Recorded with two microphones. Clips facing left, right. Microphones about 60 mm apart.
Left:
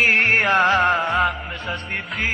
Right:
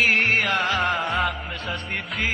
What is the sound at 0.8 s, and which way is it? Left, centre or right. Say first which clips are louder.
Music: left 5 dB; centre.